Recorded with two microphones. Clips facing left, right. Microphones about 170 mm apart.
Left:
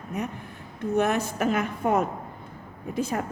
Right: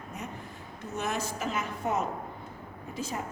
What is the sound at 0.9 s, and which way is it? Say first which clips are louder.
A woman's voice: left 8 dB; 60° left (ahead or behind).